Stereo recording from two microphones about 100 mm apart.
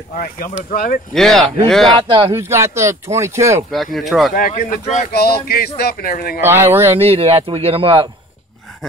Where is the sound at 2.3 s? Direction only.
25° right (ahead or behind).